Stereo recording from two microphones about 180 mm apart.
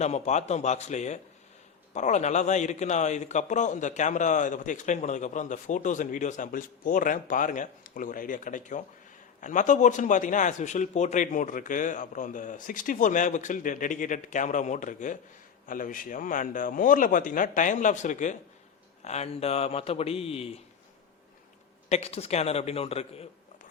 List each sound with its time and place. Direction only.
0.0 s a man's voice: 40° left (ahead or behind)
21.8 s speech: 35° left (ahead or behind)